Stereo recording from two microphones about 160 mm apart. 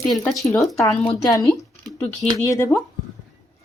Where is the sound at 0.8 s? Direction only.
20° left (ahead or behind).